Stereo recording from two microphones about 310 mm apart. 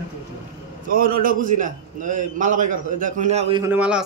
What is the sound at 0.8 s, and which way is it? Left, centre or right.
A man's voice, right.